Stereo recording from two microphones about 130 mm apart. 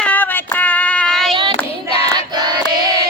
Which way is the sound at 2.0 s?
30° right (ahead or behind).